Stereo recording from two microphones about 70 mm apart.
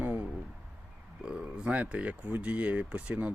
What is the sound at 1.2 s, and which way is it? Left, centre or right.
Speech, centre.